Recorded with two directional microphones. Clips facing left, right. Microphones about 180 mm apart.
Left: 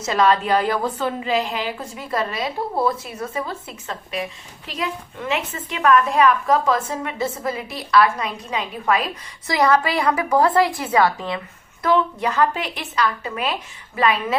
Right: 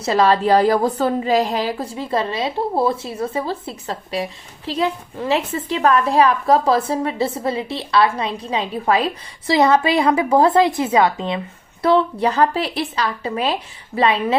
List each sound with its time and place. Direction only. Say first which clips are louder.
0.0 s a woman's voice: right 3 dB; 30° right (ahead or behind)
11.8 s a woman's voice: right 3 dB; 35° right (ahead or behind)